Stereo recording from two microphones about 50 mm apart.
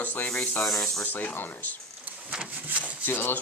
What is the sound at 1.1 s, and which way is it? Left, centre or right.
Speech, left.